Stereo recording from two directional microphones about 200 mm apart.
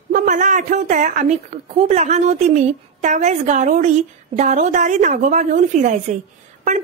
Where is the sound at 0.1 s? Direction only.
40° right (ahead or behind).